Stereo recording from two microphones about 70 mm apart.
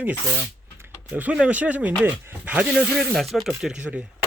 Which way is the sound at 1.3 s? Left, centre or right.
Centre.